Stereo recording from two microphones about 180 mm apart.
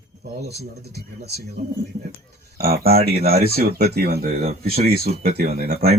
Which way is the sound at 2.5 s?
60° right (ahead or behind).